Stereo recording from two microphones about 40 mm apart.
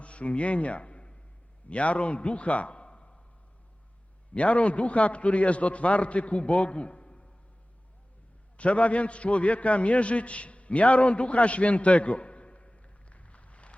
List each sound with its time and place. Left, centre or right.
0.0 s a man's voice: left
4.4 s a man's voice: left
8.5 s a man's voice: left